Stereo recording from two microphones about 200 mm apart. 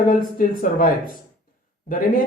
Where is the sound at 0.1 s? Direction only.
45° left (ahead or behind).